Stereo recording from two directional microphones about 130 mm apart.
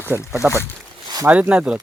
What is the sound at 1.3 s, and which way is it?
Speech, 10° right (ahead or behind).